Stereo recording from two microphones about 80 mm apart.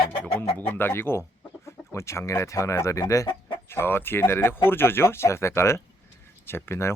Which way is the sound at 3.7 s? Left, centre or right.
Left.